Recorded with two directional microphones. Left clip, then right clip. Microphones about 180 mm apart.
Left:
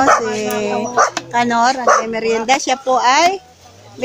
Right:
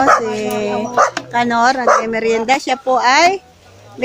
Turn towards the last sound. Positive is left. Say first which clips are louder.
# right 1 dB
turn(degrees=-10)  # may be behind; listen again after turning